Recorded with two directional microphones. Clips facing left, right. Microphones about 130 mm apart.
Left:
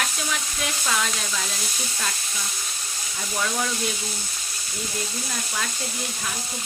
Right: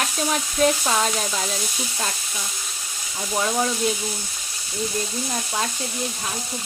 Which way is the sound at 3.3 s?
25° right (ahead or behind).